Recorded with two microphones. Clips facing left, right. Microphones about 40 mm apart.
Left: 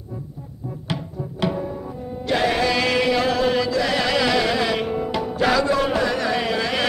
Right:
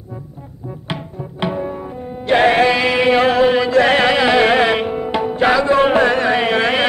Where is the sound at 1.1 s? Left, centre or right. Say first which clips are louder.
Right 3 dB; right.